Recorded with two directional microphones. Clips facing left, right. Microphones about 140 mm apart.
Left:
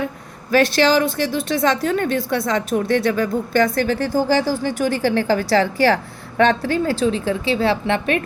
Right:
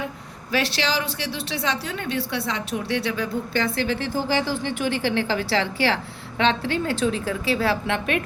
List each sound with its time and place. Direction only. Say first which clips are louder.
0.5 s a woman's voice: left 9 dB; 50° left (ahead or behind)